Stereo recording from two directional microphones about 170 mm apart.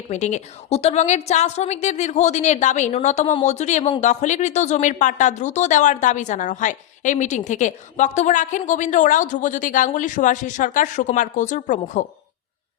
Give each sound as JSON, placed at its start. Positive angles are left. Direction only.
{"t": 0.1, "sound": "speech", "side_deg": 45}